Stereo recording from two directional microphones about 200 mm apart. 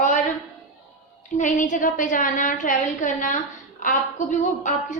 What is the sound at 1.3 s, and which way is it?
A woman's voice, 40° left (ahead or behind).